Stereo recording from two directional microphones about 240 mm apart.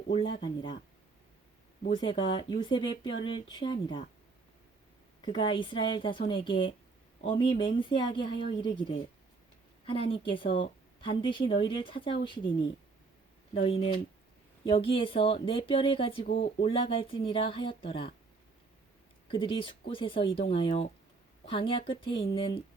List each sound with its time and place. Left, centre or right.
0.1 s speech: left
1.8 s speech: left
5.2 s speech: centre
19.3 s speech: left